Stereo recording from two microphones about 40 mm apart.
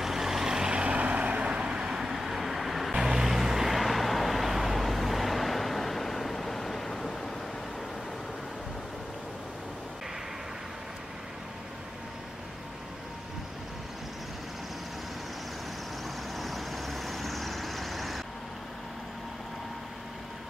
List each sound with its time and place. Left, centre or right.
0.0 s vehicle: centre
2.0 s vehicle: centre
16.3 s vehicle: centre